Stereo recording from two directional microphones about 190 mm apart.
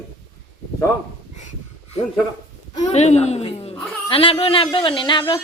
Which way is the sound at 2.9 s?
35° left (ahead or behind).